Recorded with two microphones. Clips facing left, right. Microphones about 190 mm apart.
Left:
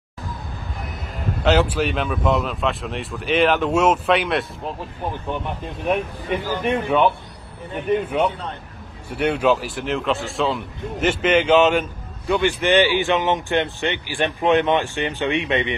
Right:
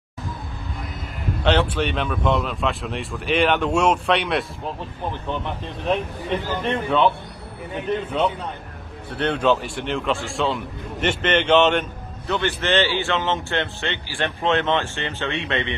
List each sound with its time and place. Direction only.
1.4 s speech: 5° left (ahead or behind)
5.9 s speech: 10° left (ahead or behind)
7.9 s speech: 10° left (ahead or behind)